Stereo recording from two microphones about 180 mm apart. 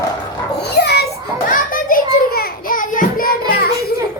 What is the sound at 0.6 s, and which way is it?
Children playing, 65° left (ahead or behind).